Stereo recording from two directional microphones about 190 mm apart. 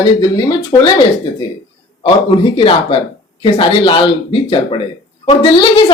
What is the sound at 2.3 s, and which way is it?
Speech, 25° left (ahead or behind).